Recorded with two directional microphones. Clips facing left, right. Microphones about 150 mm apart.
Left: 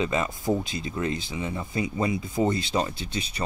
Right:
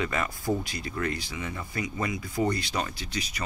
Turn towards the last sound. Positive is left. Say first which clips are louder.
# left 2 dB
turn(degrees=30)  # may be behind; listen again after turning